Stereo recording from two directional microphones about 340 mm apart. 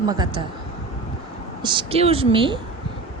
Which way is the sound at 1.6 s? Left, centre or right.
Centre.